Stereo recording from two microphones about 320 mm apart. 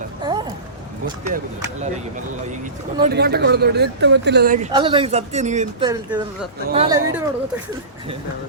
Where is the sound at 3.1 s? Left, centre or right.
Right.